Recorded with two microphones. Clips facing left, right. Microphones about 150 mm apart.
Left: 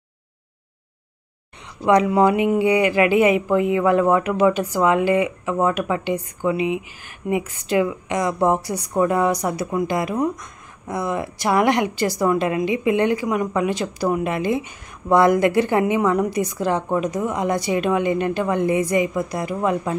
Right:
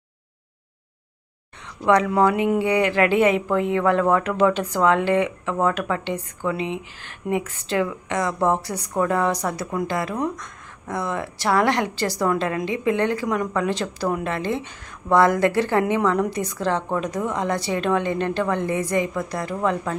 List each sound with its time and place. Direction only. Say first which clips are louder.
1.9 s speech: left 2 dB; 15° left (ahead or behind)